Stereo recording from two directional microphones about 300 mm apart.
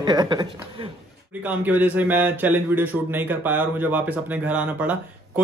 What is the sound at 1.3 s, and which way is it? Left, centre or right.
Speech, centre.